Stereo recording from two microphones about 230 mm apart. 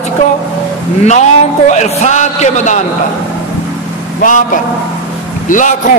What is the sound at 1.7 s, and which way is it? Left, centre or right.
A man's voice, left.